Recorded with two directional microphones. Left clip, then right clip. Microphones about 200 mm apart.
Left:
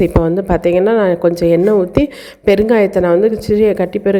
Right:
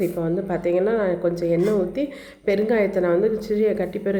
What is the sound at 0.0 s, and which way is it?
A woman's voice, 45° left (ahead or behind).